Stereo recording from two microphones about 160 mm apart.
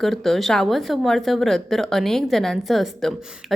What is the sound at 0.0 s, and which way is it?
Speech, centre (ahead or behind).